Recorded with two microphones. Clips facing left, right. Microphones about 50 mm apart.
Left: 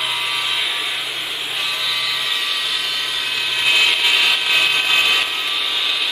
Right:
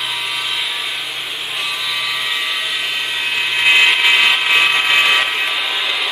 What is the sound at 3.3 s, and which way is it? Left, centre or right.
Vehicle, right.